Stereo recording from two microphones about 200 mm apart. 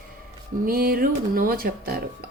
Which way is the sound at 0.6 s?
45° right (ahead or behind).